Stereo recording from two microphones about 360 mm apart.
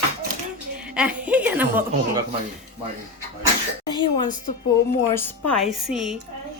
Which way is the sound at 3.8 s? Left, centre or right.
Centre.